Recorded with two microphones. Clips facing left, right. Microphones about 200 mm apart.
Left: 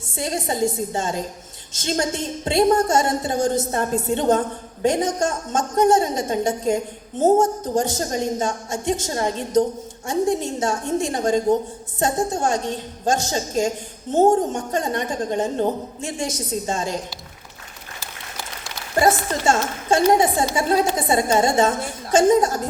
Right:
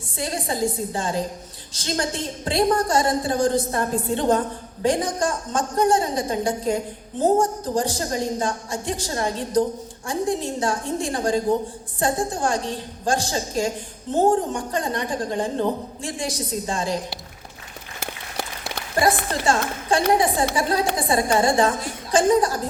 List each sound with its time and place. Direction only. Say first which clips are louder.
0.2 s a woman's voice: left 2 dB; 25° left (ahead or behind)
19.0 s a woman's voice: left 2 dB; 25° left (ahead or behind)